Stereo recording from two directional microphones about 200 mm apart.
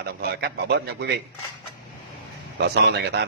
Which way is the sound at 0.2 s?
55° right (ahead or behind).